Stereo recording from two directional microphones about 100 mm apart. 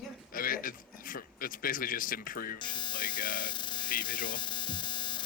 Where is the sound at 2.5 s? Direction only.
50° left (ahead or behind).